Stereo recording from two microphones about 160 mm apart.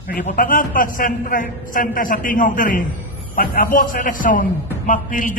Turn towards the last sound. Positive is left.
turn(degrees=55)  # may be behind; listen again after turning